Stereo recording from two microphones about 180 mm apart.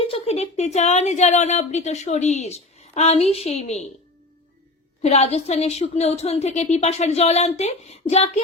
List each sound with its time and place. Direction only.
0.0 s a woman's voice: 35° left (ahead or behind)
5.0 s a woman's voice: 35° left (ahead or behind)